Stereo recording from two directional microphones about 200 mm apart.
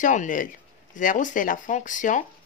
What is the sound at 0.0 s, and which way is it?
A woman's voice, 40° left (ahead or behind).